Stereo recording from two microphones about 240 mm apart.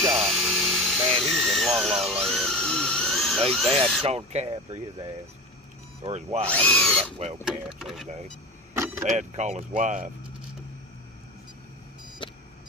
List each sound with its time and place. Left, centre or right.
0.1 s a sound: centre
3.6 s speech: right
6.5 s speech: centre
7.0 s speech: right
7.4 s speech: centre
8.7 s vehicle: centre
9.0 s speech: right
12.2 s vehicle: centre